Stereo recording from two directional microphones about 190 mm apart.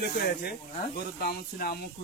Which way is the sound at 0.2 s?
55° left (ahead or behind).